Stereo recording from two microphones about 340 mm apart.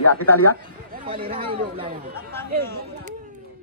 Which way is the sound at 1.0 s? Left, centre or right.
Centre.